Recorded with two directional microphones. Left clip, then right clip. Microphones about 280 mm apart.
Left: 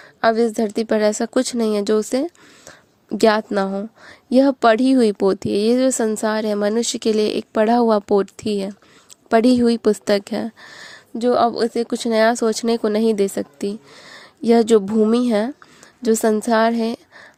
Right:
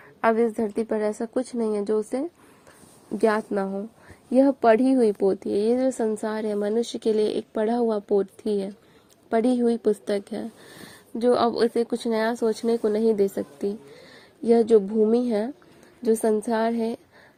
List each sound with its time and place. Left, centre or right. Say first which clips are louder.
0.0 s a woman's voice: left 5 dB; left
5.5 s speech: left 5 dB; left
5.7 s a woman's voice: left 6 dB; left
7.2 s speech: left 3 dB; left
7.5 s a woman's voice: left 12 dB; left
8.4 s speech: left 3 dB; left
9.3 s a woman's voice: left 7 dB; left
14.0 s a sound: left 8 dB; left
15.0 s a woman's voice: left 4 dB; left